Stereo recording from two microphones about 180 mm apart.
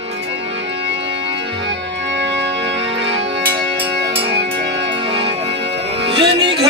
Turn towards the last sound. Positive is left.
turn(degrees=-30)  # may be behind; listen again after turning